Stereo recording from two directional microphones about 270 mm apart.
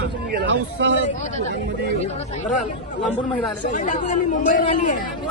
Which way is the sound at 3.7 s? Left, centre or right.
Left.